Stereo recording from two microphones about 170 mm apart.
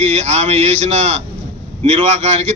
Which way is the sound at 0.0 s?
40° right (ahead or behind).